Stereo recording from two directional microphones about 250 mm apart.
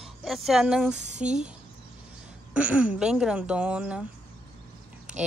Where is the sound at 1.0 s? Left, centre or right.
Right.